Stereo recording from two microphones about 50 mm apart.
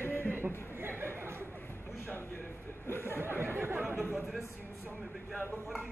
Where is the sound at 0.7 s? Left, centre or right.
Right.